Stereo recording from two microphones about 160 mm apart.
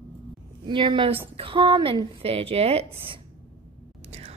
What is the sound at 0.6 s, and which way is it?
A woman's voice, 30° right (ahead or behind).